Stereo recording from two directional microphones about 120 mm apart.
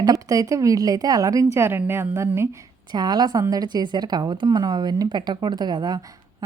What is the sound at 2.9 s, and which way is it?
A woman's voice, 35° right (ahead or behind).